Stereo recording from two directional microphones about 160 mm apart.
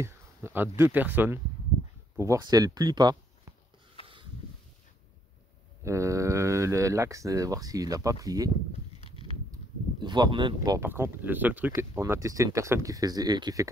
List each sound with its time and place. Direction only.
0.0 s a sound: 15° right (ahead or behind)
0.7 s speech: 15° right (ahead or behind)
2.1 s speech: 20° right (ahead or behind)
5.9 s speech: 20° right (ahead or behind)
9.1 s a sound: 35° left (ahead or behind)
10.0 s speech: 30° right (ahead or behind)
10.9 s speech: 10° right (ahead or behind)